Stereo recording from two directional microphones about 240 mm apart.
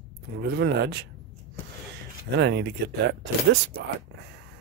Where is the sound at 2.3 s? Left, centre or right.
Right.